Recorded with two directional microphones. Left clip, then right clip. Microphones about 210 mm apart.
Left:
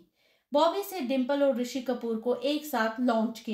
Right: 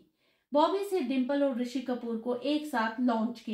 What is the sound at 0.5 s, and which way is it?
A woman's voice, 40° left (ahead or behind).